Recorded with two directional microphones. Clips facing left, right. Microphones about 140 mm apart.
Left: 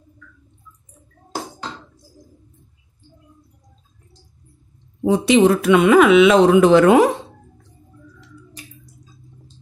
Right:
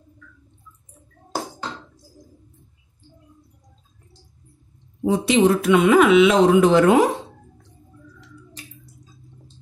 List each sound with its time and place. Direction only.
5.0 s speech: 90° left